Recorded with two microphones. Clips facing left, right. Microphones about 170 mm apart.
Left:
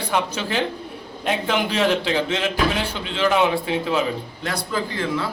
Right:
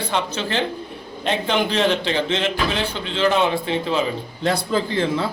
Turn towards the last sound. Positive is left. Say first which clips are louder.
# right 3 dB
turn(degrees=-25)  # may be behind; listen again after turning